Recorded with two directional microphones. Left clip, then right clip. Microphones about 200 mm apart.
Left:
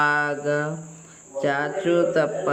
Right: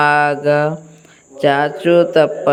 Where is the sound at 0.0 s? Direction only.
35° right (ahead or behind).